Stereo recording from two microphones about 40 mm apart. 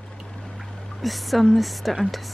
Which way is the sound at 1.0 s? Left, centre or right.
Centre.